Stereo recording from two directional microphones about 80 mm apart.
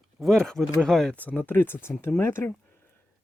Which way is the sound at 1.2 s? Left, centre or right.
Left.